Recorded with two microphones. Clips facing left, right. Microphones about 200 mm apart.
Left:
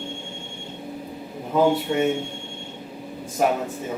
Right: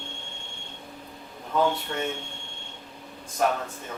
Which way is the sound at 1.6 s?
10° left (ahead or behind).